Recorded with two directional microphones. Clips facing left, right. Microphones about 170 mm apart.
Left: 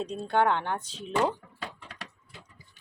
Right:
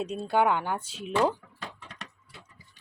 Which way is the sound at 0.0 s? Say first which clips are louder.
Right 1 dB; 5° right (ahead or behind).